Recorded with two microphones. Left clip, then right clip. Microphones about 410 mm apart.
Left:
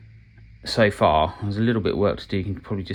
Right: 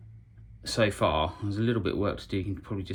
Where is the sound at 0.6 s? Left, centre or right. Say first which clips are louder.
Left 7 dB; centre.